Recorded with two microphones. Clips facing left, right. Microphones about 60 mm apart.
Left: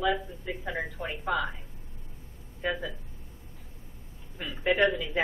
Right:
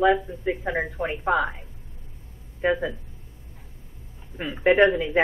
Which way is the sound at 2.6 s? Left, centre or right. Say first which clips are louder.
Right 8 dB; right.